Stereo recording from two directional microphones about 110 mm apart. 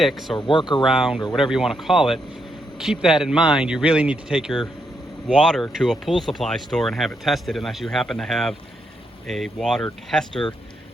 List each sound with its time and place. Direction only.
0.0 s speech: centre (ahead or behind)
0.3 s speech: 45° left (ahead or behind)
0.9 s speech: 5° right (ahead or behind)